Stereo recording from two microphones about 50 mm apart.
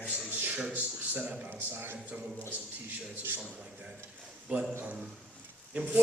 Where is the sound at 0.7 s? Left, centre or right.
Right.